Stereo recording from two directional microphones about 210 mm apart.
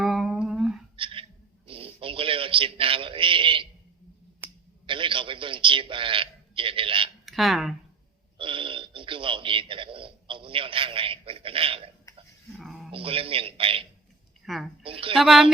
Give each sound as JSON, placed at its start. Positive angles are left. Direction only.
{"t": 0.0, "sound": "a sound", "side_deg": 0}
{"t": 0.9, "sound": "a sound", "side_deg": -25}
{"t": 4.9, "sound": "a man's voice", "side_deg": -25}
{"t": 7.3, "sound": "speech", "side_deg": 0}
{"t": 8.4, "sound": "a man's voice", "side_deg": -25}
{"t": 12.5, "sound": "a sound", "side_deg": 0}
{"t": 12.9, "sound": "a man's voice", "side_deg": -25}
{"t": 14.4, "sound": "speech", "side_deg": 0}
{"t": 14.8, "sound": "speech", "side_deg": -25}
{"t": 15.1, "sound": "a woman's voice", "side_deg": 0}